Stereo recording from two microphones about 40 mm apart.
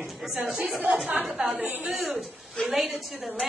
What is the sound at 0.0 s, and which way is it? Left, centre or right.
A woman's voice, centre.